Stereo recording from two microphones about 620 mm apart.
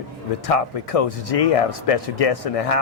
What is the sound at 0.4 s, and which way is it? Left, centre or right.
Speech, left.